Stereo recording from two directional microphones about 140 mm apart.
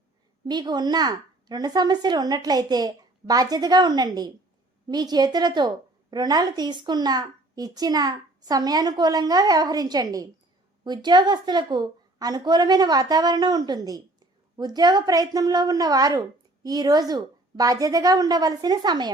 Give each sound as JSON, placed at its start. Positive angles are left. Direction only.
{"t": 0.4, "sound": "a woman's voice", "side_deg": -30}